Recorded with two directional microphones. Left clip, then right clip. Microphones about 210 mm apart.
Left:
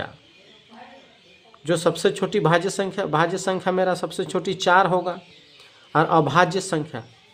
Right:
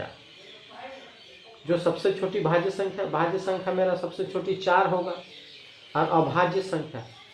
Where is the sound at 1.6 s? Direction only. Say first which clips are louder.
Left 4 dB; 35° left (ahead or behind).